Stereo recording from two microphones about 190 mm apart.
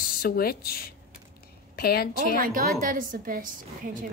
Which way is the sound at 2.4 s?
45° right (ahead or behind).